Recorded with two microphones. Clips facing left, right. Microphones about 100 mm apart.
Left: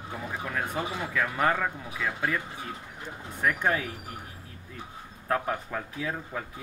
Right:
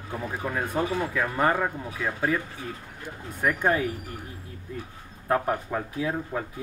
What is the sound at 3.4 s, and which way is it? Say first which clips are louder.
Speech: right 3 dB; 10° right (ahead or behind).